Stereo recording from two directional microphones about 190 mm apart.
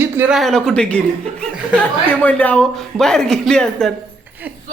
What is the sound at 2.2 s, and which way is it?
Speech, 5° left (ahead or behind).